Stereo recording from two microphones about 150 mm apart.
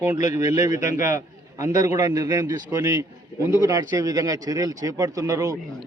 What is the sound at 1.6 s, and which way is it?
A man's voice, 20° right (ahead or behind).